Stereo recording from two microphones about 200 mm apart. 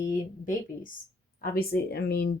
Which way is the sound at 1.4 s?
50° left (ahead or behind).